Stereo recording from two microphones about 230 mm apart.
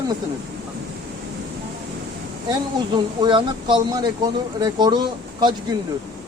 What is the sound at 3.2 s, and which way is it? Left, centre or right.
Speech, centre.